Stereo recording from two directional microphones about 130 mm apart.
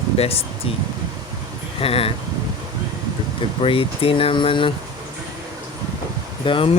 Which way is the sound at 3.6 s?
45° left (ahead or behind).